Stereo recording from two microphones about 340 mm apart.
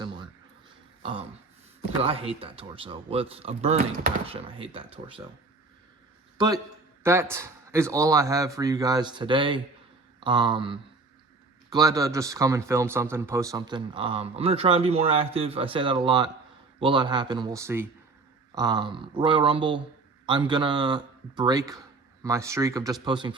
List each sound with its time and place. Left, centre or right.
2.0 s speech: centre
6.3 s a man's voice: centre